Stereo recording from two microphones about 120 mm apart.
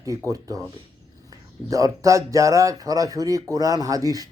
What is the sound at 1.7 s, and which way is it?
Speech, 25° right (ahead or behind).